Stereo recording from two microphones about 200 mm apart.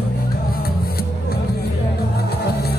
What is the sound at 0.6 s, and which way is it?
Music, 50° left (ahead or behind).